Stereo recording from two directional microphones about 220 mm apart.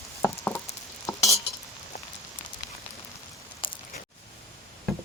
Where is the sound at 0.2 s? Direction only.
10° left (ahead or behind).